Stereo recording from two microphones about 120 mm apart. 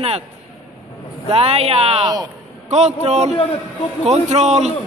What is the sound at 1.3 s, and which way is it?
Speech, 55° right (ahead or behind).